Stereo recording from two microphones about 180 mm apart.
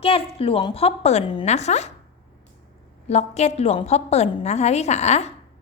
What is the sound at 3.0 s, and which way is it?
A woman's voice, 35° left (ahead or behind).